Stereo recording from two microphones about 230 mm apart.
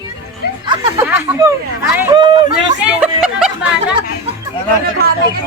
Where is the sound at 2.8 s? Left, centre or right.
Centre.